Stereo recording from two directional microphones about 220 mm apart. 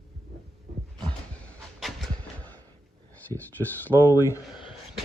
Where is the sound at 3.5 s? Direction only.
10° left (ahead or behind).